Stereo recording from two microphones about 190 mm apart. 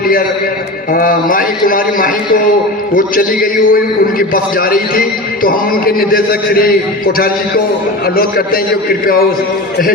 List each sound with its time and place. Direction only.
0.9 s a man's voice: 45° left (ahead or behind)
8.1 s a man's voice: 50° left (ahead or behind)